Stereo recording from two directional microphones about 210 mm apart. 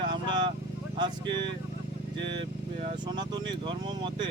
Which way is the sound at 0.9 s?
20° right (ahead or behind).